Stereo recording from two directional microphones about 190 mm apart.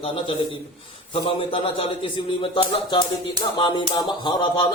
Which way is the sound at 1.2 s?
30° left (ahead or behind).